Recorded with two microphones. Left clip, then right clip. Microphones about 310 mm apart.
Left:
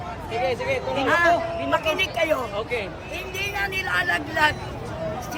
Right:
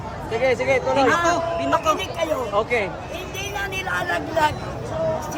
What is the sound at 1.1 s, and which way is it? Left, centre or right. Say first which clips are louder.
A man's voice: even; centre.